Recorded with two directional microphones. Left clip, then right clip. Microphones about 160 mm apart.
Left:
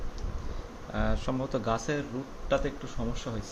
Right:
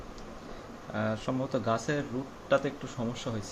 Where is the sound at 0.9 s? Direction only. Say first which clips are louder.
Even; 5° left (ahead or behind).